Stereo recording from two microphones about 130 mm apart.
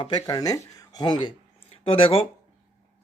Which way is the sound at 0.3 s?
30° left (ahead or behind).